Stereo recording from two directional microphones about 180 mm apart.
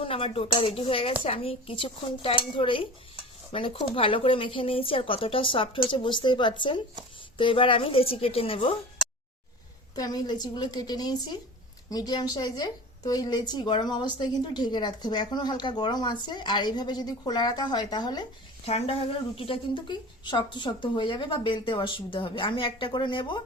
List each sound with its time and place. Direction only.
0.0 s a woman's voice: 30° left (ahead or behind)
9.9 s a woman's voice: 20° left (ahead or behind)